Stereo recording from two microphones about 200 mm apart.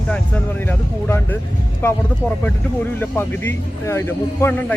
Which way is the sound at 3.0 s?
10° left (ahead or behind).